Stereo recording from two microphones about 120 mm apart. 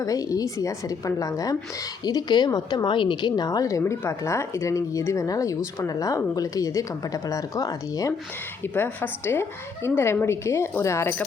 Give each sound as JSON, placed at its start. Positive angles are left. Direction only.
{"t": 0.0, "sound": "a woman's voice", "side_deg": 30}
{"t": 8.6, "sound": "a woman's voice", "side_deg": 15}